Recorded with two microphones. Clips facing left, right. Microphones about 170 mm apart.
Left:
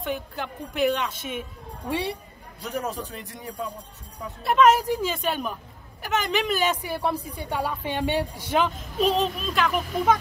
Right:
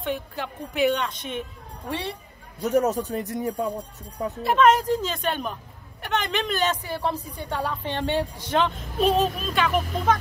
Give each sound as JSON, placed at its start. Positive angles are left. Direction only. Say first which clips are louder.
{"t": 0.0, "sound": "a woman's voice", "louder": "right 1 dB", "side_deg": 0}
{"t": 2.6, "sound": "speech", "louder": "right 9 dB", "side_deg": -45}
{"t": 4.4, "sound": "a woman's voice", "louder": "even", "side_deg": 0}